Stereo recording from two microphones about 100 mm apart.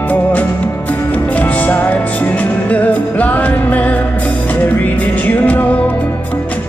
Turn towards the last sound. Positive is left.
turn(degrees=15)  # may be behind; listen again after turning